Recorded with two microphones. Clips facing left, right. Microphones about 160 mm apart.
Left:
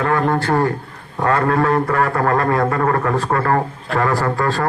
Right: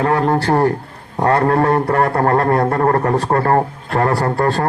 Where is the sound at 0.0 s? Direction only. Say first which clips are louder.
Right 2 dB; 35° right (ahead or behind).